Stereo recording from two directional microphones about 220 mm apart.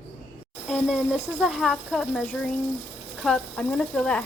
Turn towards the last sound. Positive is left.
turn(degrees=5)  # may be behind; listen again after turning